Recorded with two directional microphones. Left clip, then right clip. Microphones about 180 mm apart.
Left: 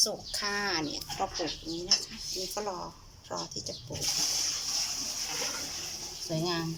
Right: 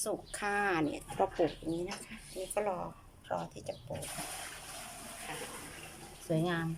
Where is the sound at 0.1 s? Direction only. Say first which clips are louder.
Left 2 dB; 5° right (ahead or behind).